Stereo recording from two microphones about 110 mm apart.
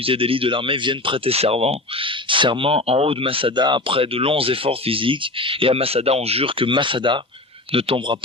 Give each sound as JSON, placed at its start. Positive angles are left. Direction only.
{"t": 0.0, "sound": "speech", "side_deg": -55}
{"t": 2.3, "sound": "speech", "side_deg": -50}